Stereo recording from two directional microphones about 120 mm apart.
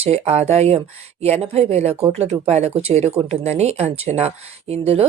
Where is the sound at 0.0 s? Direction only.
60° right (ahead or behind).